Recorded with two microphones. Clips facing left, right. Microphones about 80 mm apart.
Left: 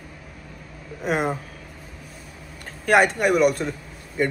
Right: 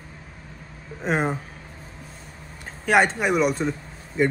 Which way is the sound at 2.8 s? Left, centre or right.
Centre.